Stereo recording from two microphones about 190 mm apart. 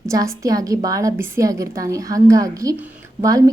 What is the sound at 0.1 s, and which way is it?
A woman's voice, 20° right (ahead or behind).